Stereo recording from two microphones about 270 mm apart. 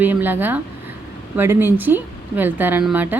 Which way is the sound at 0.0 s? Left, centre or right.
Centre.